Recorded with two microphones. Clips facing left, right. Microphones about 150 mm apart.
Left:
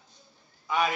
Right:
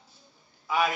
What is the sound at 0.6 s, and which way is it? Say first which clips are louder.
Speech: right 1 dB; centre (ahead or behind).